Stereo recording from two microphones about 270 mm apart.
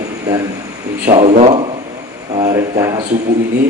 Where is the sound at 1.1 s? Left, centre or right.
Right.